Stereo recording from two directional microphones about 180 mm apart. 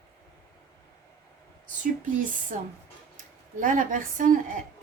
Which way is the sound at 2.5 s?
45° right (ahead or behind).